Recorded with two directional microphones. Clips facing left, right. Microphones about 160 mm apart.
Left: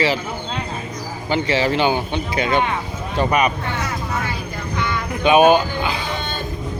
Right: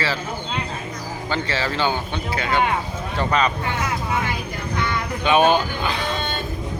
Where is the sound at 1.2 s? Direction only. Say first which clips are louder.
Left 6 dB; 15° left (ahead or behind).